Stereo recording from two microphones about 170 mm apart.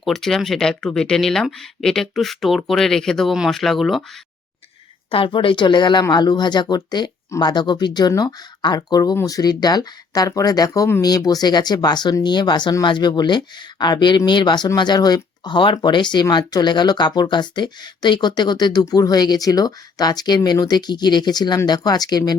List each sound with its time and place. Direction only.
0.0 s speech: centre (ahead or behind)
5.1 s speech: 30° left (ahead or behind)